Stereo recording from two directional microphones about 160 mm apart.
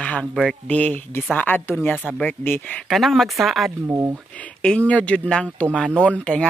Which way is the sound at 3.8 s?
15° right (ahead or behind).